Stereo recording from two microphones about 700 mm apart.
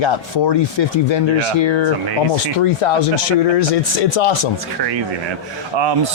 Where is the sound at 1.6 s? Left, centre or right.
Left.